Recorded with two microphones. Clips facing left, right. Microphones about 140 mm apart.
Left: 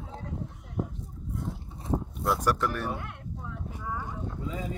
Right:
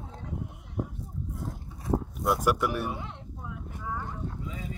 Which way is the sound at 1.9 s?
5° right (ahead or behind).